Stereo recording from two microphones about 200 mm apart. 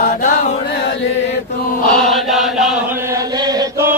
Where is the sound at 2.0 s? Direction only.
Centre (ahead or behind).